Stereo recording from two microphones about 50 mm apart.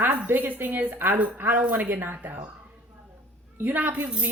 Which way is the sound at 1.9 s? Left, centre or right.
Right.